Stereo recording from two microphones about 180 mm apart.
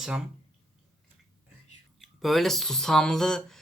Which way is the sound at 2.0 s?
Centre (ahead or behind).